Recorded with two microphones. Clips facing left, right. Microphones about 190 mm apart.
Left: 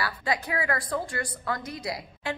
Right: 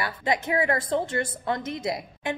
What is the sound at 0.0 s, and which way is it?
A woman's voice, 20° right (ahead or behind).